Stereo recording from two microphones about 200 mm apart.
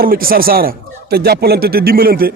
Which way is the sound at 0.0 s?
45° right (ahead or behind).